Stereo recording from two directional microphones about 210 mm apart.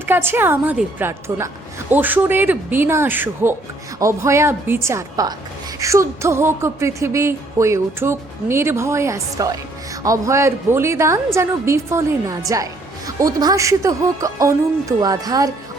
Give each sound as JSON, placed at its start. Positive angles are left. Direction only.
{"t": 0.0, "sound": "music", "side_deg": -10}